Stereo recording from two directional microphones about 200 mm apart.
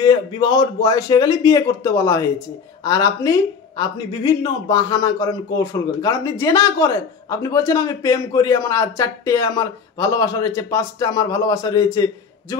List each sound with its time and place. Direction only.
0.0 s speech: 20° left (ahead or behind)